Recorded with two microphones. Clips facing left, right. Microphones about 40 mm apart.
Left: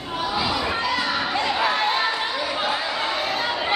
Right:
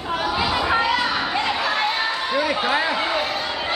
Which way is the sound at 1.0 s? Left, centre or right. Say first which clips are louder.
Right 1 dB; centre.